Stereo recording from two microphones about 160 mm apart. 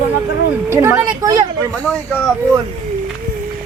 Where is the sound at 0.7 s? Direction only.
15° right (ahead or behind).